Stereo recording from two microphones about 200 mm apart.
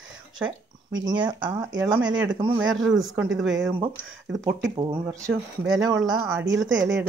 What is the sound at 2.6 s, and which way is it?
Speech, 75° right (ahead or behind).